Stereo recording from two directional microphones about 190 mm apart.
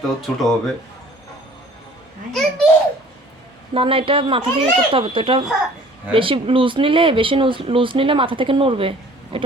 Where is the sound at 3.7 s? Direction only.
30° right (ahead or behind).